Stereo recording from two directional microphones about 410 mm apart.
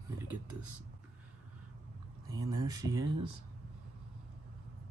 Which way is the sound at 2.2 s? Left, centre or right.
Centre.